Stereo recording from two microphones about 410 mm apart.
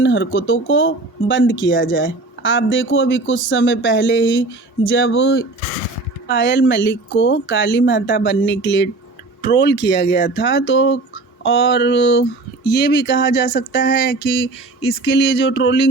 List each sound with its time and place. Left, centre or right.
0.0 s speech: left